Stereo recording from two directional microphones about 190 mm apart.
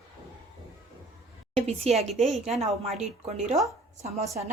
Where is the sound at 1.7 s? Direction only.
35° right (ahead or behind).